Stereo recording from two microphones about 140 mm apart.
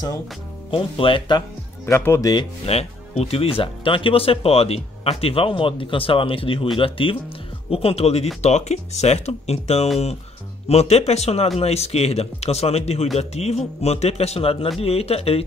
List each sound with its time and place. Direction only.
0.7 s speech: 40° left (ahead or behind)
1.9 s speech: 15° left (ahead or behind)
2.6 s speech: 50° left (ahead or behind)